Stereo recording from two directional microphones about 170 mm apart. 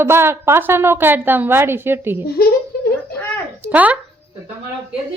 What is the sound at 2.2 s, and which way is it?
Speech, 65° left (ahead or behind).